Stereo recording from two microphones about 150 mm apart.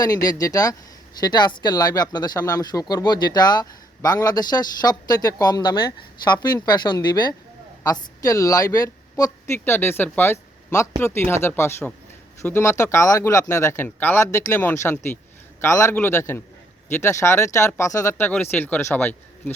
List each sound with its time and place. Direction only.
0.0 s speech: 25° left (ahead or behind)